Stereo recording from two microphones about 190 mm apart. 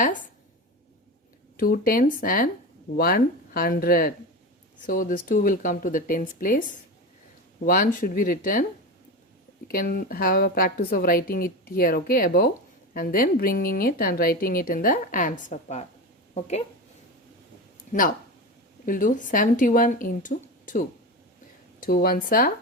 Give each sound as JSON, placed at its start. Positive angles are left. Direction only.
{"t": 1.5, "sound": "a woman's voice", "side_deg": 50}
{"t": 9.6, "sound": "a woman's voice", "side_deg": 50}
{"t": 18.9, "sound": "a woman's voice", "side_deg": 45}